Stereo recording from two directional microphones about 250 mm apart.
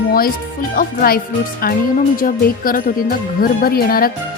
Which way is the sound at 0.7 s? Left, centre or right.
Left.